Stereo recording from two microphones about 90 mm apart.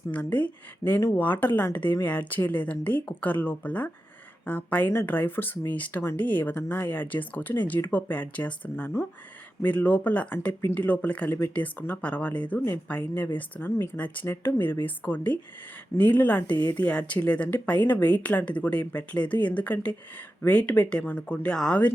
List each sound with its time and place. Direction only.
0.1 s speech: 20° left (ahead or behind)
0.9 s speech: 30° left (ahead or behind)
1.2 s speech: 20° left (ahead or behind)